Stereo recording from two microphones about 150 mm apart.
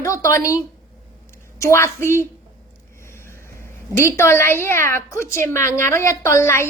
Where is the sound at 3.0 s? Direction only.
15° left (ahead or behind).